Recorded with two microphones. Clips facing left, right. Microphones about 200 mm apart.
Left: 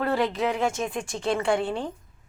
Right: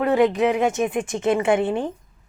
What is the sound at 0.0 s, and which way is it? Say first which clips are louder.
Speech: right 7 dB; 20° right (ahead or behind).